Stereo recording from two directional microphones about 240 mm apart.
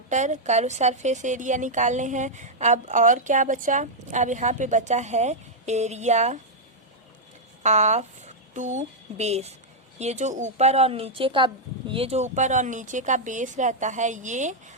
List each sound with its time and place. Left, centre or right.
0.1 s a woman's voice: right
7.6 s a woman's voice: right